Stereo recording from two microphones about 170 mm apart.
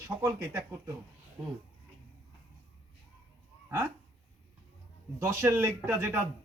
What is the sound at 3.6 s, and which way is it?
Dog, 15° right (ahead or behind).